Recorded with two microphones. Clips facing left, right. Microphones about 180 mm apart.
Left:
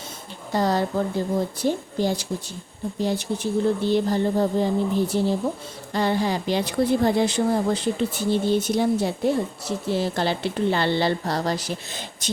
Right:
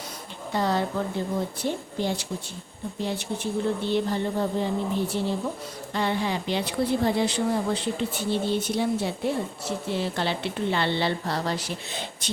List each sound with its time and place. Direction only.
0.5 s speech: 40° left (ahead or behind)